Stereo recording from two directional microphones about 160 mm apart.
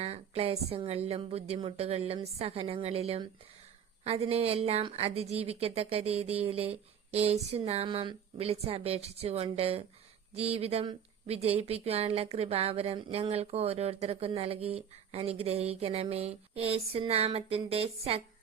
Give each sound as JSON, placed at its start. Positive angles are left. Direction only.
{"t": 0.0, "sound": "speech", "side_deg": -40}